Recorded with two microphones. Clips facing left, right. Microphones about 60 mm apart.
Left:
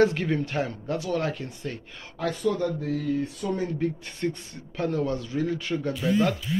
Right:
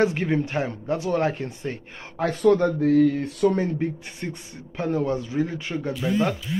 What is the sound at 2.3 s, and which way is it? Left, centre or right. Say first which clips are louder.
Speech: right 9 dB; right.